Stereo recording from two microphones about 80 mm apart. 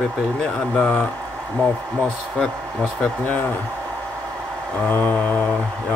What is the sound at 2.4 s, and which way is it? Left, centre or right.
Speech, centre.